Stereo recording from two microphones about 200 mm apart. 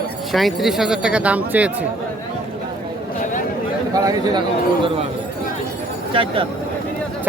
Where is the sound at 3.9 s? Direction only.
20° right (ahead or behind).